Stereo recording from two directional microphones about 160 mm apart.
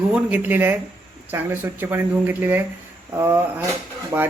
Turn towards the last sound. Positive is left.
turn(degrees=-15)  # may be behind; listen again after turning